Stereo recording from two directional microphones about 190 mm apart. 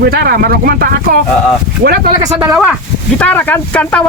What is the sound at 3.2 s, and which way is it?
Speech, 10° left (ahead or behind).